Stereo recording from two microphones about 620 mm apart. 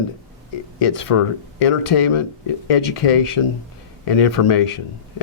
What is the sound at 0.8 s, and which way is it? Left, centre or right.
Speech, left.